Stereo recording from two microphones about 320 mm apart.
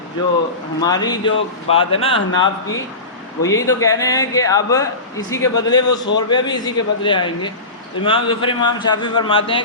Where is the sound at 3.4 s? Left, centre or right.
Centre.